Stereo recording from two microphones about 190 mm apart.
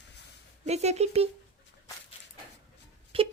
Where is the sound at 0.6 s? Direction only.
35° right (ahead or behind).